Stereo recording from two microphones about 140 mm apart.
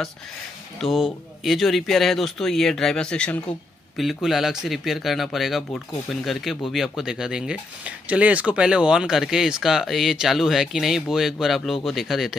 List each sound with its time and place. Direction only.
0.7 s speech: centre (ahead or behind)